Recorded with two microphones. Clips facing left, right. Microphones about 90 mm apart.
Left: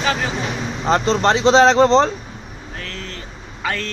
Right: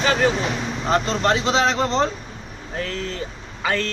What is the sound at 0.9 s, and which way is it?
Speech, 30° left (ahead or behind).